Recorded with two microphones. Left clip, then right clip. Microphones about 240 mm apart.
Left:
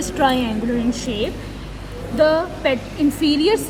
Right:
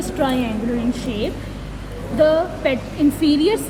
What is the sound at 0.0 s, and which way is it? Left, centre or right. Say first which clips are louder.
Speech: left 3 dB; left.